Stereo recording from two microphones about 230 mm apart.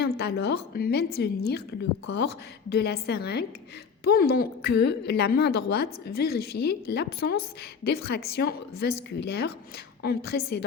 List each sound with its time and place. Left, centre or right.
0.0 s a woman's voice: left